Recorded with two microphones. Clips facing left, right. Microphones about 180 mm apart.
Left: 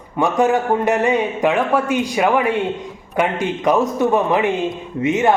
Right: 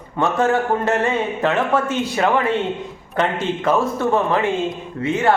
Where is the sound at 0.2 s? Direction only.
15° left (ahead or behind).